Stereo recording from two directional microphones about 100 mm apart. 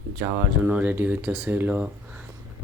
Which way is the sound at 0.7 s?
20° right (ahead or behind).